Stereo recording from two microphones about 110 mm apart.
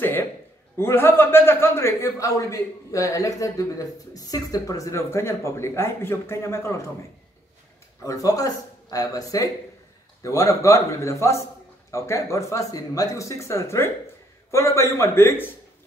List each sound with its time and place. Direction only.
0.0 s a sound: 20° left (ahead or behind)
0.7 s a man's voice: 20° left (ahead or behind)
8.0 s a man's voice: 30° left (ahead or behind)